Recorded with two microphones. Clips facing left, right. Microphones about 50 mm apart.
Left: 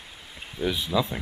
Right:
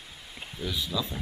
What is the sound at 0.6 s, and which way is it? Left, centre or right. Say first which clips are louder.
Speech: left 7 dB; left.